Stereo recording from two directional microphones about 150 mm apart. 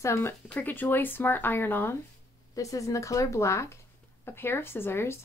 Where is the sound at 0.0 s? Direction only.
15° left (ahead or behind).